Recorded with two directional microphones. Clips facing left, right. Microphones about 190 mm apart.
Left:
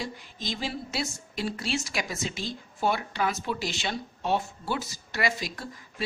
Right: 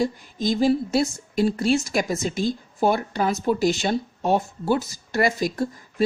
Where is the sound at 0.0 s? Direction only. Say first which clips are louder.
Right 12 dB; 45° right (ahead or behind).